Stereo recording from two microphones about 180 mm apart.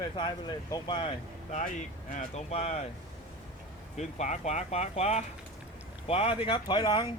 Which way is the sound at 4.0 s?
40° left (ahead or behind).